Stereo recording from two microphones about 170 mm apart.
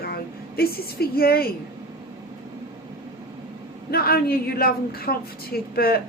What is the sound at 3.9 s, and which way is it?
A woman's voice, 65° left (ahead or behind).